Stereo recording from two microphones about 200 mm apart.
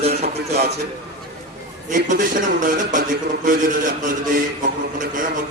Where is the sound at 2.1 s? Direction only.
40° right (ahead or behind).